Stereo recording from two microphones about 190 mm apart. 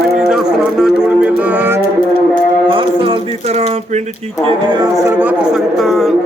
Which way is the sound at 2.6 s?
25° right (ahead or behind).